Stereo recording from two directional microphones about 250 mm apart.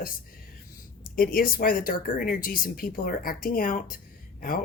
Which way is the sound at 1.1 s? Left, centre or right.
Left.